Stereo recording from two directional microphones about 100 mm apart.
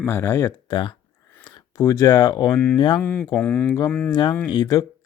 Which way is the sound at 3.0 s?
20° left (ahead or behind).